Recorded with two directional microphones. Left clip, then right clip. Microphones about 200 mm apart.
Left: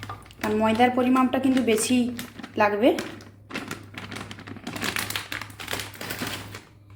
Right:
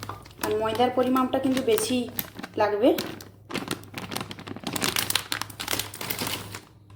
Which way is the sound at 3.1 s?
45° right (ahead or behind).